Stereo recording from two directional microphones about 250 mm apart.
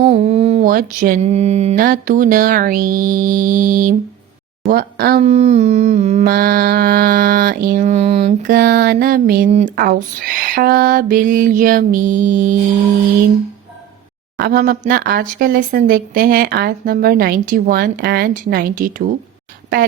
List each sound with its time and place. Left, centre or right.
0.0 s humming: right
14.3 s humming: right